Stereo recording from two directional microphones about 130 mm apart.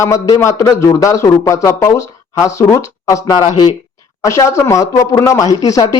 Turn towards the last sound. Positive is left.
turn(degrees=25)  # may be behind; listen again after turning